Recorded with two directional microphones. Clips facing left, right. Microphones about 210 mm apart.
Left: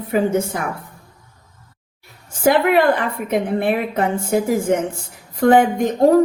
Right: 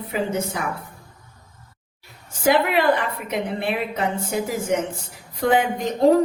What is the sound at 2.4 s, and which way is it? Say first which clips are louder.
A woman's voice: left 4 dB; 50° left (ahead or behind).